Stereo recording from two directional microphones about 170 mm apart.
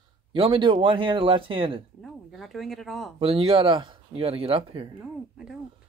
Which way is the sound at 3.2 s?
35° right (ahead or behind).